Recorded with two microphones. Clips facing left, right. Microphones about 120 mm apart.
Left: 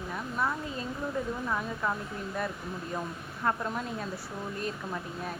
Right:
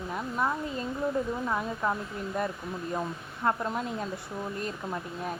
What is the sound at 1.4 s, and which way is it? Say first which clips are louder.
Speech: right 2 dB; 15° right (ahead or behind).